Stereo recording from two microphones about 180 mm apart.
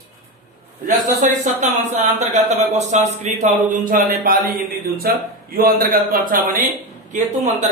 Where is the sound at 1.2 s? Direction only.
40° right (ahead or behind).